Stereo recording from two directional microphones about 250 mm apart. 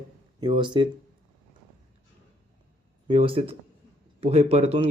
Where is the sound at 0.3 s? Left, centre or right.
Centre.